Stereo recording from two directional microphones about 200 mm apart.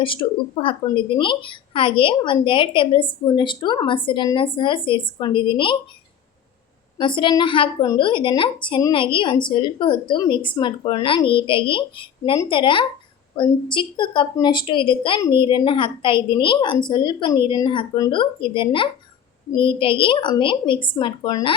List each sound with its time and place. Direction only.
0.0 s a woman's voice: 25° left (ahead or behind)
7.0 s a woman's voice: 25° left (ahead or behind)